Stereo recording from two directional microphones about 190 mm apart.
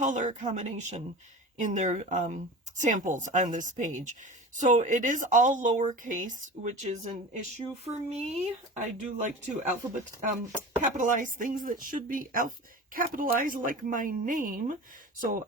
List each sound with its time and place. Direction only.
0.0 s speech: 40° right (ahead or behind)
10.8 s speech: 40° right (ahead or behind)